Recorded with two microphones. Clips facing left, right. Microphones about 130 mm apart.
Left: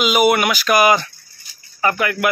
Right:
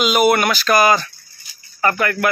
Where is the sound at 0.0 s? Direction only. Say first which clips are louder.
Even; 5° left (ahead or behind).